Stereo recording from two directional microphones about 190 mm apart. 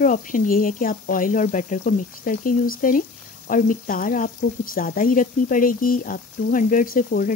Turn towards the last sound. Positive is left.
turn(degrees=45)  # may be behind; listen again after turning